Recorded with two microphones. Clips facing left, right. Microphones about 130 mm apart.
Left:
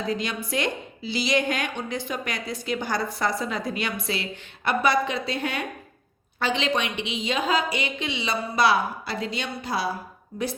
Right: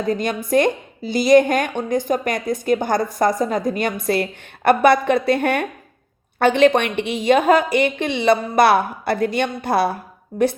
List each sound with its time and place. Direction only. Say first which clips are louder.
0.0 s a woman's voice: right 7 dB; 50° right (ahead or behind)